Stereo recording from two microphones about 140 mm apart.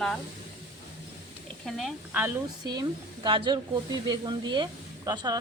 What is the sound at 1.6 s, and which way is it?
Speech, centre (ahead or behind).